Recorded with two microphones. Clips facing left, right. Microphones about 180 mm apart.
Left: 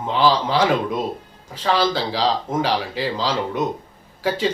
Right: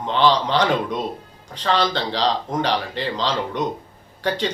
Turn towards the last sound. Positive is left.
turn(degrees=5)  # may be behind; listen again after turning